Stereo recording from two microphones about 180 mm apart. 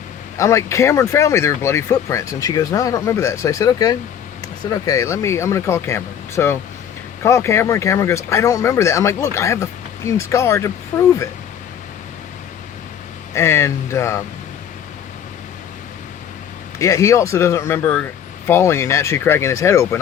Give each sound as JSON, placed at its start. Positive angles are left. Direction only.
{"t": 0.3, "sound": "speech", "side_deg": 15}
{"t": 13.3, "sound": "speech", "side_deg": 15}
{"t": 16.7, "sound": "speech", "side_deg": 15}